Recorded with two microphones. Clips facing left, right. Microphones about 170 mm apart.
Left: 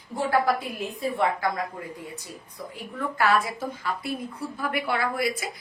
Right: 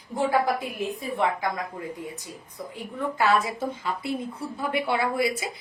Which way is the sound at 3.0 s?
20° right (ahead or behind).